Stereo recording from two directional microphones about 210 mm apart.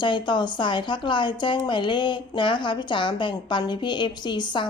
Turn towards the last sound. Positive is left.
turn(degrees=20)  # may be behind; listen again after turning